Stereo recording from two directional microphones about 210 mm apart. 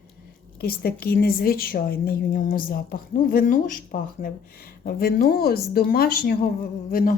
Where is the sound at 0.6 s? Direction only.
45° left (ahead or behind).